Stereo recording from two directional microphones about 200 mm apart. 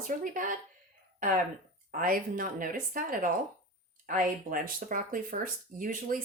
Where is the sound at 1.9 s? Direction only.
45° right (ahead or behind).